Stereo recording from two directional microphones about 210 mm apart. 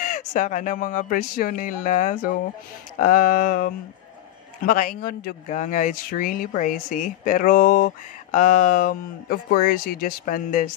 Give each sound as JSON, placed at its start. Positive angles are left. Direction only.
{"t": 0.0, "sound": "speech", "side_deg": 40}